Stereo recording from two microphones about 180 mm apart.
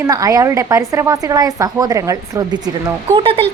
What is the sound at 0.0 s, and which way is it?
A woman's voice, 20° right (ahead or behind).